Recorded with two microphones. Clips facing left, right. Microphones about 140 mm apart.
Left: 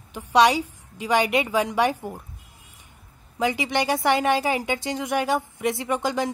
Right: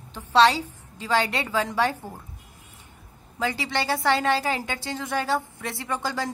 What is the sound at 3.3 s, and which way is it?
A woman's voice, 15° left (ahead or behind).